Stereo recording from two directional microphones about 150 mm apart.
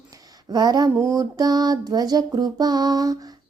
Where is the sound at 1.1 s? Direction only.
25° right (ahead or behind).